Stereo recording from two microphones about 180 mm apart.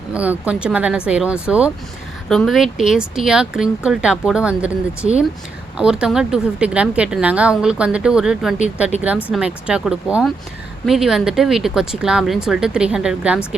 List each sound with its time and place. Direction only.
0.1 s a woman's voice: 5° right (ahead or behind)
5.7 s a woman's voice: 5° right (ahead or behind)